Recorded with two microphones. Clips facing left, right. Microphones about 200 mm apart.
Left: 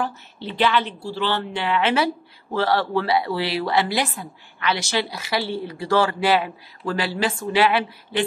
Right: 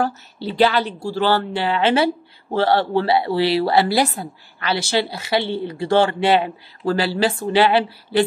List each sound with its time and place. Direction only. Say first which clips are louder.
0.0 s speech: right 5 dB; 40° right (ahead or behind)